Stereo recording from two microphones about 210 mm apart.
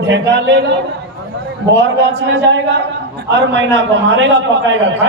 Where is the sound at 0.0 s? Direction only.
60° right (ahead or behind).